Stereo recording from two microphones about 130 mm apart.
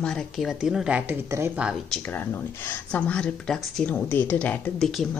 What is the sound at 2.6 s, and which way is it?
Speech, 10° left (ahead or behind).